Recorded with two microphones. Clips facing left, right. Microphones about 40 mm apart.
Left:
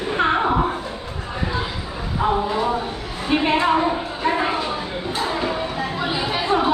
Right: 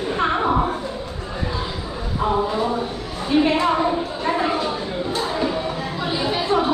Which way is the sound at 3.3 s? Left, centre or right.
Left.